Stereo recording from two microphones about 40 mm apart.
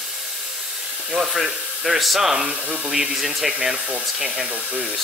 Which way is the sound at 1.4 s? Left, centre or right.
Centre.